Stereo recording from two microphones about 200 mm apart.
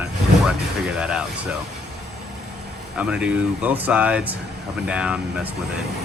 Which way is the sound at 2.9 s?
5° right (ahead or behind).